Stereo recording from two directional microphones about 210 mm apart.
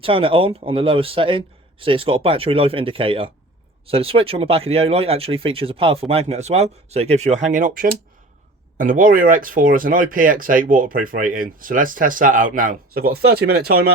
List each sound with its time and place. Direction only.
0.0 s speech: 25° right (ahead or behind); by 13.7 s 50° right (ahead or behind)